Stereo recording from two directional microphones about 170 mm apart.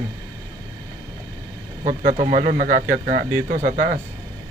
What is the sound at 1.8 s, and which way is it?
Speech, 45° right (ahead or behind).